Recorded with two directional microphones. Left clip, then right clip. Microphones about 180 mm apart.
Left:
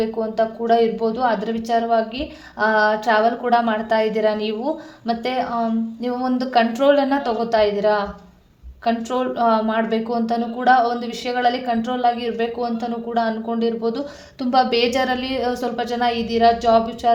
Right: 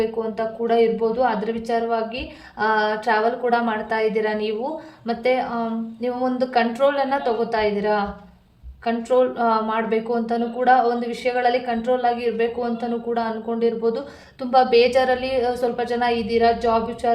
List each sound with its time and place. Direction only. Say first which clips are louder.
0.0 s a woman's voice: left 3 dB; 25° left (ahead or behind)